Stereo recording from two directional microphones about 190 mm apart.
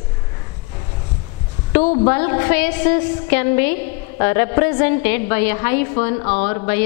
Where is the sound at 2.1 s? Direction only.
15° left (ahead or behind).